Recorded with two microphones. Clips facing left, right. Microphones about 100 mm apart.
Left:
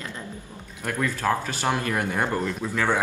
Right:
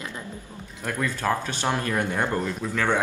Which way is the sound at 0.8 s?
5° left (ahead or behind).